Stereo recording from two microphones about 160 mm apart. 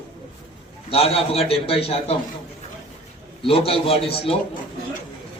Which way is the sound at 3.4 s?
35° left (ahead or behind).